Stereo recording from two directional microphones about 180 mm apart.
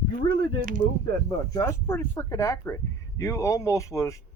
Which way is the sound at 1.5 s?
15° left (ahead or behind).